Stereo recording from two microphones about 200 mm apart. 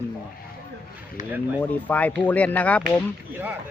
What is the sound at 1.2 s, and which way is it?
Speech, 40° left (ahead or behind).